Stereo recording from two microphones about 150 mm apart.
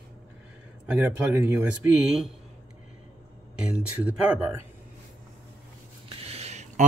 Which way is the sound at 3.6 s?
10° right (ahead or behind).